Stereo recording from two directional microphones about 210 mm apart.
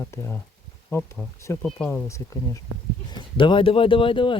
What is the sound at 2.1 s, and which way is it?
Speech, 15° left (ahead or behind).